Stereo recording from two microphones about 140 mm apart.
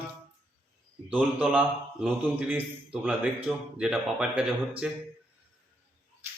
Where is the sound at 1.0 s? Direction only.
10° right (ahead or behind).